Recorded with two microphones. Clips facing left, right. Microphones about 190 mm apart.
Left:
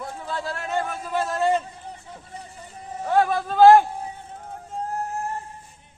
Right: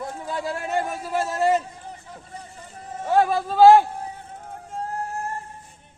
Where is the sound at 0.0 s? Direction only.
15° right (ahead or behind).